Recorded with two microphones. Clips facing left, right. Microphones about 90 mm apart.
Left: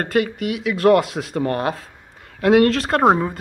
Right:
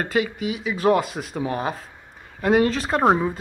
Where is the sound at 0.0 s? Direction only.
60° left (ahead or behind).